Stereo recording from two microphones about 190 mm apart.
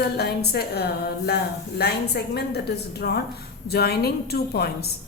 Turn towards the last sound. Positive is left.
turn(degrees=55)  # may be behind; listen again after turning